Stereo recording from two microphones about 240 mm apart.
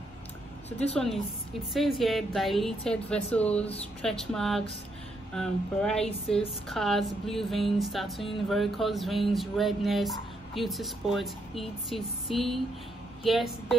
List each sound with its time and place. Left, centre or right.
0.7 s speech: left
0.9 s speech: centre